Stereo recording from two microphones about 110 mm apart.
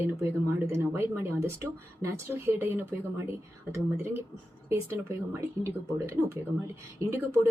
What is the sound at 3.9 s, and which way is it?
Speech, 20° right (ahead or behind).